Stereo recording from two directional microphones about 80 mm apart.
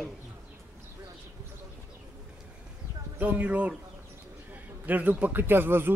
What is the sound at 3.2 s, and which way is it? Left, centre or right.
A man's voice, centre.